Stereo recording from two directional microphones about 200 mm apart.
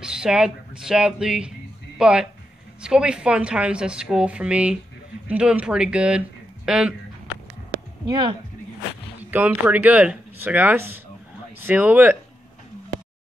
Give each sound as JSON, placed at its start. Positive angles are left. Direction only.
{"t": 0.0, "sound": "speech", "side_deg": -5}
{"t": 8.0, "sound": "speech", "side_deg": -20}
{"t": 9.2, "sound": "speech", "side_deg": -10}